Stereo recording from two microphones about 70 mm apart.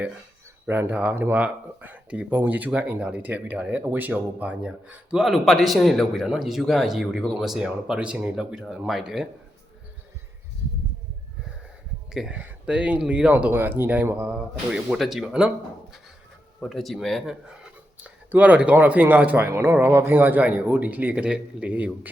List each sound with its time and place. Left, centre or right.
0.7 s speech: right
5.1 s a man's voice: centre
12.3 s speech: centre
13.5 s speech: right
14.9 s a man's voice: centre
16.6 s a man's voice: centre
17.5 s a sound: centre
18.3 s speech: right
19.5 s speech: right